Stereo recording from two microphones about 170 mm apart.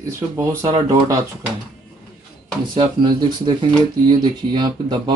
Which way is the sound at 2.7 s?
30° right (ahead or behind).